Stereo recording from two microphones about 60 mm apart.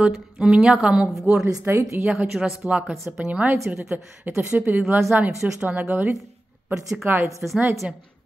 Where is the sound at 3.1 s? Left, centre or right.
Right.